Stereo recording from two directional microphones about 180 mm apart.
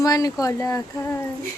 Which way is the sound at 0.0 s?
20° left (ahead or behind).